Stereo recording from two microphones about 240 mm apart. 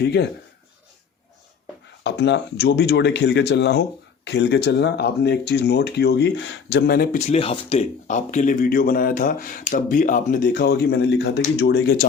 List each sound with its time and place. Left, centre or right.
0.0 s speech: left
2.0 s speech: left